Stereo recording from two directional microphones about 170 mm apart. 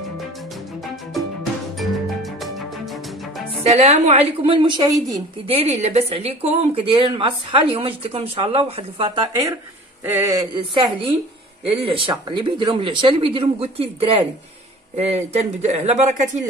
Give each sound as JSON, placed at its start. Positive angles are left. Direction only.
{"t": 1.1, "sound": "music", "side_deg": 0}
{"t": 3.7, "sound": "a woman's voice", "side_deg": -40}
{"t": 5.5, "sound": "a woman's voice", "side_deg": -40}
{"t": 10.0, "sound": "a sound", "side_deg": -15}
{"t": 10.5, "sound": "a woman's voice", "side_deg": -30}